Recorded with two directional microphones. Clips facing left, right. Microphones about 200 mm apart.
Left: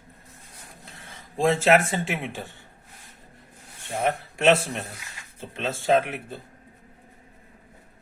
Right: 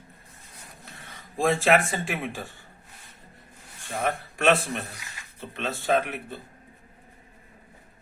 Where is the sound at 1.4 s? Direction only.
25° left (ahead or behind).